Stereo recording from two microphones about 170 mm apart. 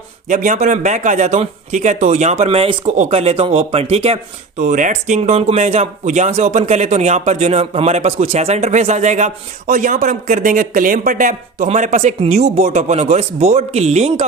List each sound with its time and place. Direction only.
0.3 s speech: 50° right (ahead or behind)
4.6 s speech: 50° right (ahead or behind)